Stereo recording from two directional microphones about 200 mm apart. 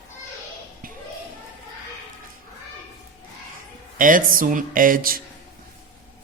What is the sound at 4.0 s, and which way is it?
Speech, 40° right (ahead or behind).